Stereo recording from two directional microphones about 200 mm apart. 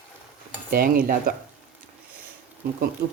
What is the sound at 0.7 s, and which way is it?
Cutlery, 45° right (ahead or behind).